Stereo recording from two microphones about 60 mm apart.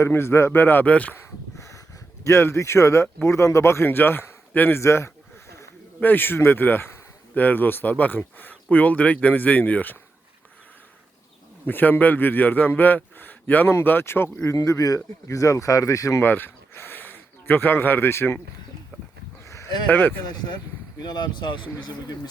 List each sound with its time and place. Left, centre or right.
0.0 s speech: left
0.9 s speech: left
1.5 s a sound: left
2.2 s a man's voice: left
4.8 s speech: left
6.0 s a man's voice: left
11.6 s a man's voice: left
14.5 s speech: left
16.2 s speech: left
19.9 s a man's voice: left